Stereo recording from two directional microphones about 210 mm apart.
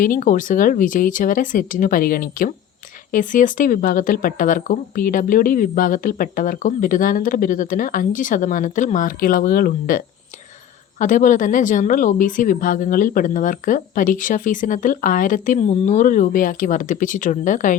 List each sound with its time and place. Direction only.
0.0 s speech: 40° left (ahead or behind)
11.0 s speech: 40° left (ahead or behind)